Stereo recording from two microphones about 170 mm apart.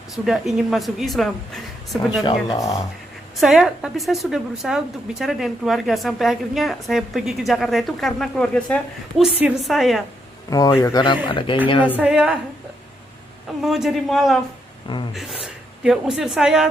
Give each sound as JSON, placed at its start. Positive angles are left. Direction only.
{"t": 0.3, "sound": "a woman's voice", "side_deg": 0}
{"t": 2.5, "sound": "a man's voice", "side_deg": 20}
{"t": 3.3, "sound": "a woman's voice", "side_deg": 0}
{"t": 10.5, "sound": "a man's voice", "side_deg": 25}
{"t": 11.9, "sound": "a woman's voice", "side_deg": -5}
{"t": 13.6, "sound": "a woman's voice", "side_deg": 0}